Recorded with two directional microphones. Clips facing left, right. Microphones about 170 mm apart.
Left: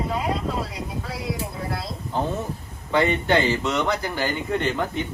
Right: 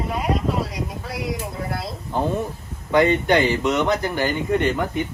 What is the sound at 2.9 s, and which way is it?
A man's voice, 15° right (ahead or behind).